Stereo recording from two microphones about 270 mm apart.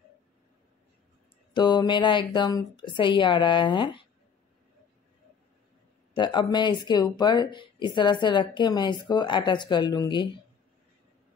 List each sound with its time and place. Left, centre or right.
1.5 s speech: centre
6.1 s speech: centre